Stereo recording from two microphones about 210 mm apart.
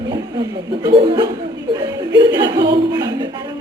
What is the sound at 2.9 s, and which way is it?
Music, 20° right (ahead or behind).